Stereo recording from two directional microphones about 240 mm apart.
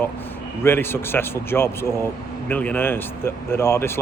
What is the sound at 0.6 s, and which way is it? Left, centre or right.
Speech, centre.